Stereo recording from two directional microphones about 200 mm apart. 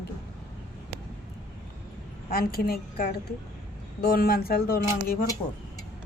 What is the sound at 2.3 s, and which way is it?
A man's voice, 50° left (ahead or behind).